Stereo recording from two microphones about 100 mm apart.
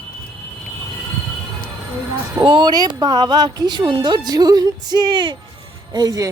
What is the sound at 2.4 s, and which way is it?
Speech, 45° right (ahead or behind).